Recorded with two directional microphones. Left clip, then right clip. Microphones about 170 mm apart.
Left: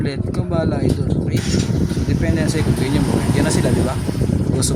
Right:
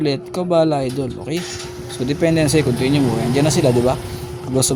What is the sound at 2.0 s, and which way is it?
Speech, 30° right (ahead or behind).